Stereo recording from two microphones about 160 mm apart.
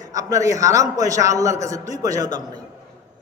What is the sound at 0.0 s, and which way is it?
A man's voice, 20° right (ahead or behind).